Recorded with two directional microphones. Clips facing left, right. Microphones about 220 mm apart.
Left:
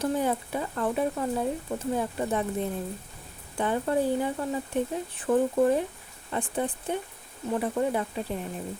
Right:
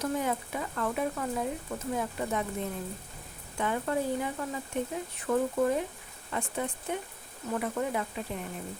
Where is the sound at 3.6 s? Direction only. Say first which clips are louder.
Left 4 dB; 30° left (ahead or behind).